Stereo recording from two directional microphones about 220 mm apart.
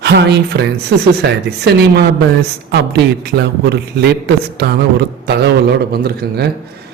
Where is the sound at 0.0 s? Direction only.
50° right (ahead or behind).